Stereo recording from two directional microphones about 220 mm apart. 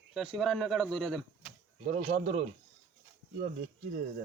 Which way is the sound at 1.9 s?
30° right (ahead or behind).